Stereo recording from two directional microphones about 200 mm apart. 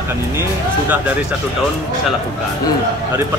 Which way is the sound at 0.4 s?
10° right (ahead or behind).